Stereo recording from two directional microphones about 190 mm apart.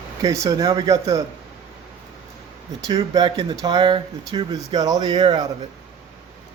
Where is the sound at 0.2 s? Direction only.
20° right (ahead or behind).